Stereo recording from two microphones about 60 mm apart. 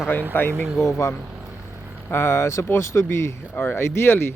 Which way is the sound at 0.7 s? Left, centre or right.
Left.